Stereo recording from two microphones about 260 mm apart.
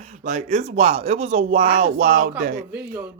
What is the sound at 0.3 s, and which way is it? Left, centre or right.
Speech, right.